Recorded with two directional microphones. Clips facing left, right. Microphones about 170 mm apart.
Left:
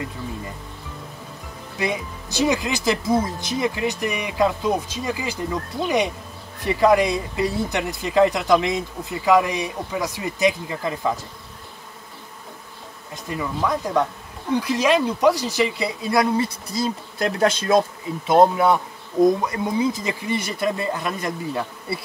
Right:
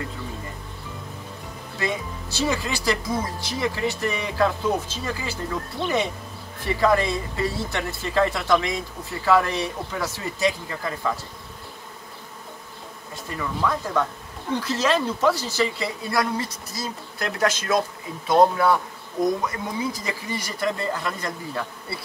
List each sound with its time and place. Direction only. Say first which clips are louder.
1.8 s speech: left 2 dB; 15° left (ahead or behind)
13.1 s speech: left 3 dB; 20° left (ahead or behind)